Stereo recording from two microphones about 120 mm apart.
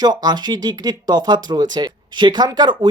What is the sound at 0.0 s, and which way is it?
Speech, 35° right (ahead or behind).